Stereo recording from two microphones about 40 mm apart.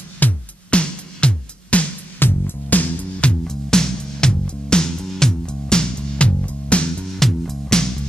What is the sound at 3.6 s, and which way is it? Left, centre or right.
Music, centre.